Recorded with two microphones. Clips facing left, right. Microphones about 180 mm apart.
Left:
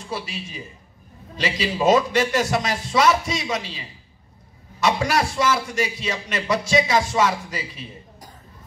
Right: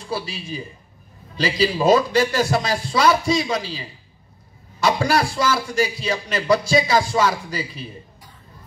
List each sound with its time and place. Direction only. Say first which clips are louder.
0.1 s a man's voice: right 4 dB; 35° right (ahead or behind)